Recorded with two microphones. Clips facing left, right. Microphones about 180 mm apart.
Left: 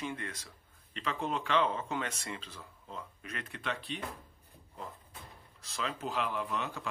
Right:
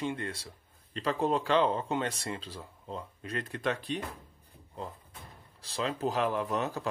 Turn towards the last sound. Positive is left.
turn(degrees=-40)  # may be behind; listen again after turning